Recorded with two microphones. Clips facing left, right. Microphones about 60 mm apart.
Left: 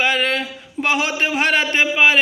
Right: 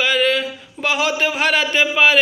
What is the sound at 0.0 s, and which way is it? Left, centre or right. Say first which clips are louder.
A man's voice: right 2 dB; left.